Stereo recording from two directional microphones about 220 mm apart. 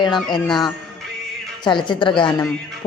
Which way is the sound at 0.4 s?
Centre (ahead or behind).